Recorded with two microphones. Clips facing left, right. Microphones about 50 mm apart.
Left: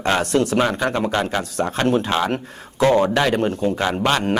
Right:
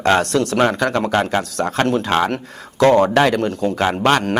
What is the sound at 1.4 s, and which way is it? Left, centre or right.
Speech, right.